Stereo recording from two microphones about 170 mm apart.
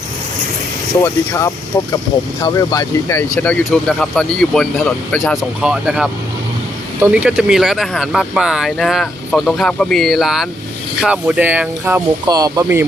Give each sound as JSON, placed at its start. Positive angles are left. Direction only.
{"t": 1.0, "sound": "speech", "side_deg": 15}
{"t": 12.2, "sound": "speech", "side_deg": -20}